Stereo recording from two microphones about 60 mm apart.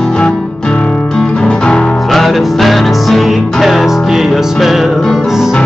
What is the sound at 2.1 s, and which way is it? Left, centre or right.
Music, centre.